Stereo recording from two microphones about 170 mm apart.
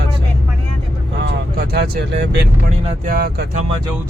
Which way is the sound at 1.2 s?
65° right (ahead or behind).